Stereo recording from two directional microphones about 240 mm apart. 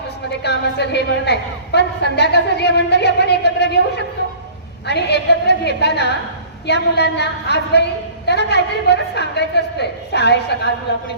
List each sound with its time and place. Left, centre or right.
0.4 s a woman's voice: left
4.9 s a woman's voice: left